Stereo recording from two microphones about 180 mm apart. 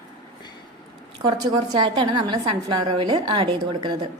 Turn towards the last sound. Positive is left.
turn(degrees=-25)  # may be behind; listen again after turning